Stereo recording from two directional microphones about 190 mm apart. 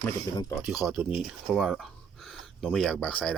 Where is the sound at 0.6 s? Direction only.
5° right (ahead or behind).